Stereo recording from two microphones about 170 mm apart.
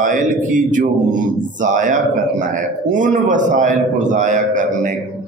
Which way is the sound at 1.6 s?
50° right (ahead or behind).